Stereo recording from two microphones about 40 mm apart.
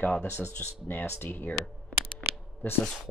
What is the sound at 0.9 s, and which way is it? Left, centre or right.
Speech, left.